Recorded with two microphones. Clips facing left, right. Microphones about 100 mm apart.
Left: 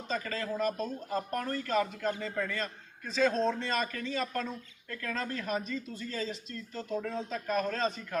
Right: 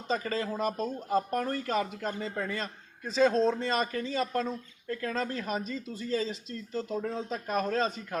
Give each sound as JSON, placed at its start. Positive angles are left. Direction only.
{"t": 0.1, "sound": "speech", "side_deg": -35}